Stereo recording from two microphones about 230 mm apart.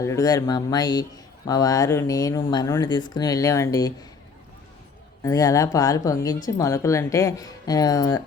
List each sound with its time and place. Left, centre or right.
0.0 s speech: centre
5.2 s speech: centre